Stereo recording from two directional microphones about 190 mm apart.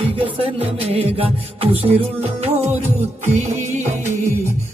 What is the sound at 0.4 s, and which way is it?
Music, 30° right (ahead or behind).